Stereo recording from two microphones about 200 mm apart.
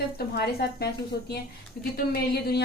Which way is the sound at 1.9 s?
50° left (ahead or behind).